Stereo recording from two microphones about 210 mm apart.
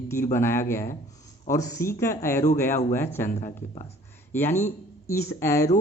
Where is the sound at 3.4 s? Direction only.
30° left (ahead or behind).